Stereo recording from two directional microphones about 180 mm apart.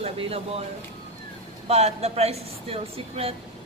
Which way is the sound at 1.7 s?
35° right (ahead or behind).